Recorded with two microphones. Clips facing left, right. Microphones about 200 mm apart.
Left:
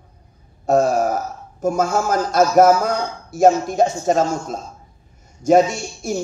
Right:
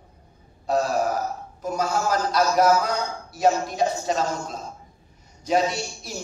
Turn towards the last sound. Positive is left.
turn(degrees=50)  # may be behind; listen again after turning